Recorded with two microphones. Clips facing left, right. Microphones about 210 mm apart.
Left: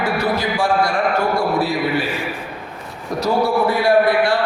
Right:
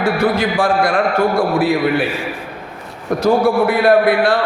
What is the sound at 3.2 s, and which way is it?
A man's voice, 50° right (ahead or behind).